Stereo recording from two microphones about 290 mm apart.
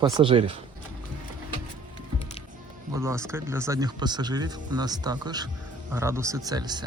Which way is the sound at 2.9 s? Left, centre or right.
Centre.